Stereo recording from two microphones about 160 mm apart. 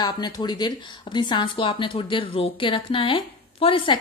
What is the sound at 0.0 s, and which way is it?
Speech, 25° left (ahead or behind).